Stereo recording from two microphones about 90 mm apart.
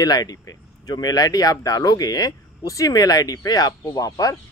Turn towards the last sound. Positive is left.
turn(degrees=40)  # may be behind; listen again after turning